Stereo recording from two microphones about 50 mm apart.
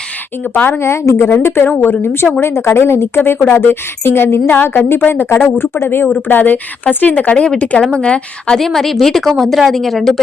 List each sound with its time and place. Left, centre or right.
0.5 s a woman's voice: left
0.8 s speech: left
1.1 s a woman's voice: left
2.4 s speech: left
4.0 s speech: left
4.4 s a woman's voice: left
6.2 s a woman's voice: left
8.5 s a woman's voice: centre